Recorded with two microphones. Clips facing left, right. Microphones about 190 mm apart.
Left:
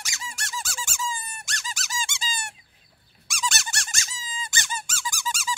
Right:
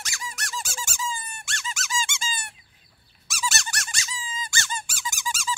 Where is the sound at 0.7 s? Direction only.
40° right (ahead or behind).